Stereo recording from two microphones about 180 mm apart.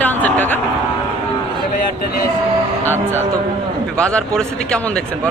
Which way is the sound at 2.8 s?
10° left (ahead or behind).